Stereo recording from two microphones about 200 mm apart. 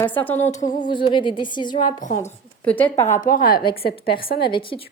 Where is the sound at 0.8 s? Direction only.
25° left (ahead or behind).